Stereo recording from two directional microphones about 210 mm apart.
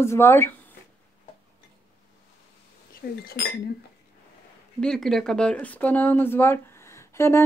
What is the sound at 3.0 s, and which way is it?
Speech, 45° left (ahead or behind).